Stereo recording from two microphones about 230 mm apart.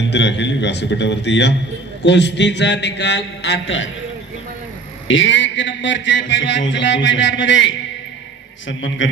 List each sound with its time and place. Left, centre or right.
0.1 s a man's voice: left
5.0 s a man's voice: left